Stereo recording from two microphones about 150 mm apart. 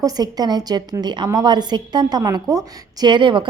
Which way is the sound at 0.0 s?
25° right (ahead or behind).